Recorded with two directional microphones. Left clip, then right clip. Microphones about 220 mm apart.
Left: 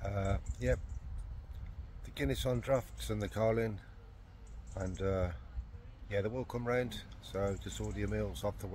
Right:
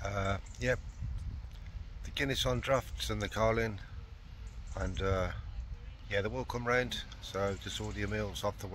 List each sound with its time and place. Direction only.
0.0 s keys jangling: 5° left (ahead or behind)
2.0 s speech: 5° left (ahead or behind)